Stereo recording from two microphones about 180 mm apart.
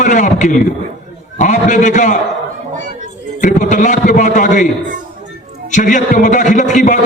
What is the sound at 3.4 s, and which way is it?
A man's voice, 45° left (ahead or behind).